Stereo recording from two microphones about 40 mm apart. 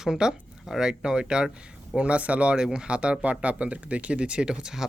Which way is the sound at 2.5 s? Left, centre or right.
Centre.